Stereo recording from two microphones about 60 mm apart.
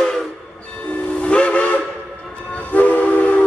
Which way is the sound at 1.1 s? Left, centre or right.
Left.